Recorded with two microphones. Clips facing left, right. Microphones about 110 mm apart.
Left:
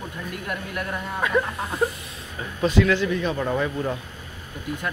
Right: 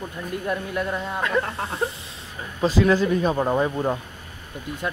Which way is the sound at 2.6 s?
30° right (ahead or behind).